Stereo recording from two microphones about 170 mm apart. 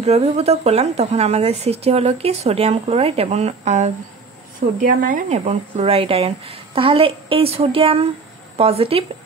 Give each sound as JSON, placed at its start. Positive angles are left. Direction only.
{"t": 0.0, "sound": "speech", "side_deg": -40}